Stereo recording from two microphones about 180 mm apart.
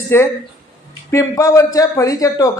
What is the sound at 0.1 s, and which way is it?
Speech, 15° left (ahead or behind).